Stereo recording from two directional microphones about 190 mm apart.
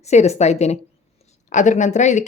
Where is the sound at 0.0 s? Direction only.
35° left (ahead or behind).